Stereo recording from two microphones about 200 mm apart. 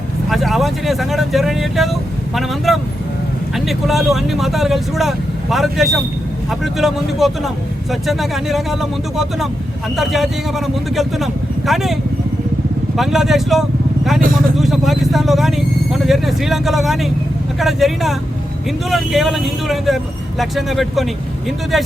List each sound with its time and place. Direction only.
0.3 s speech: centre (ahead or behind)
13.0 s speech: centre (ahead or behind)
14.2 s speech: 45° right (ahead or behind)
14.5 s speech: centre (ahead or behind)